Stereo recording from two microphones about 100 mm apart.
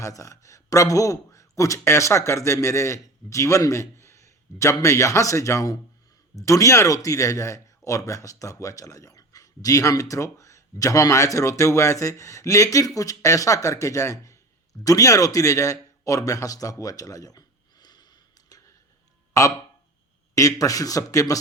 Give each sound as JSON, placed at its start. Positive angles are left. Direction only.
{"t": 0.0, "sound": "a man's voice", "side_deg": 35}
{"t": 19.3, "sound": "a man's voice", "side_deg": 30}